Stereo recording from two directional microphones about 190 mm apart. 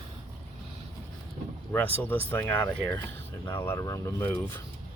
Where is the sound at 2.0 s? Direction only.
10° left (ahead or behind).